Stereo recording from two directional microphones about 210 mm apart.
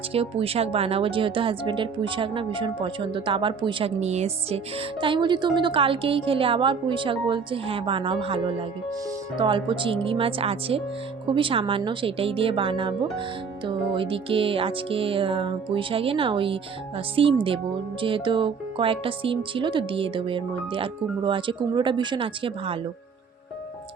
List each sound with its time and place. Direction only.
0.1 s speech: 25° right (ahead or behind)
9.4 s speech: 25° right (ahead or behind)